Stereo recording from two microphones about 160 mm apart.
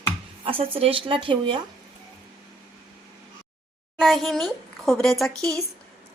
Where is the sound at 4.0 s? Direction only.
Centre (ahead or behind).